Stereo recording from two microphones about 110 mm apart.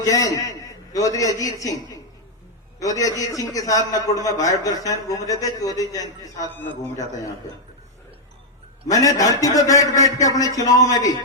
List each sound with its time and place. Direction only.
0.0 s a man's voice: 30° left (ahead or behind)
2.8 s a man's voice: 30° left (ahead or behind)
8.9 s a man's voice: 35° left (ahead or behind)